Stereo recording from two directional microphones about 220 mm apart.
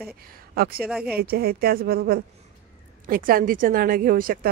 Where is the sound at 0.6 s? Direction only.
45° right (ahead or behind).